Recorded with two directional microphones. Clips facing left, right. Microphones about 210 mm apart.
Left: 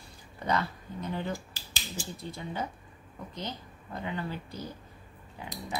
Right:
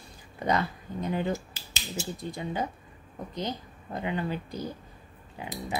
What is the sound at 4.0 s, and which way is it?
Speech, 15° right (ahead or behind).